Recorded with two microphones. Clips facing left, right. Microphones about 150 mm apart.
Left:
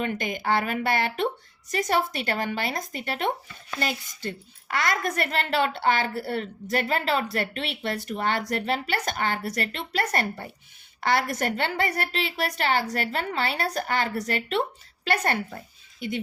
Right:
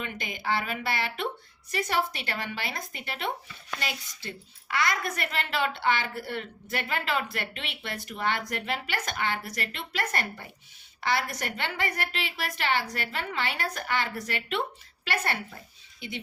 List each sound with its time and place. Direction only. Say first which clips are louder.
0.0 s speech: left 7 dB; 45° left (ahead or behind)